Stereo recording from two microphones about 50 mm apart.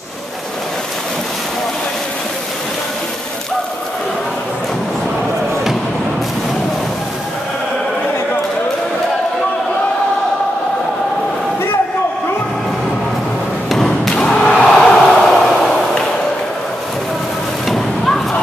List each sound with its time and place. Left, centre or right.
13.7 s thump: centre
14.1 s thump: left
14.7 s a sound: centre